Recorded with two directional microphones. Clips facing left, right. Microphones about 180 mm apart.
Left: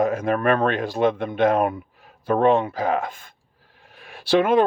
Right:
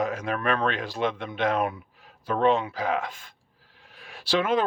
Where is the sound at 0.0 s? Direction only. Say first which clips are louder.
Left 7 dB; 55° left (ahead or behind).